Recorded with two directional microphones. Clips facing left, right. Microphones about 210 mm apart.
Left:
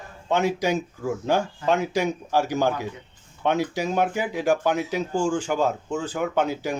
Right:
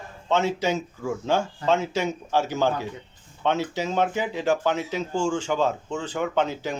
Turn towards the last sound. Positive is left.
turn(degrees=10)  # may be behind; listen again after turning